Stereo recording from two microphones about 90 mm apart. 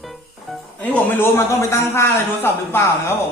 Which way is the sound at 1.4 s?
30° left (ahead or behind).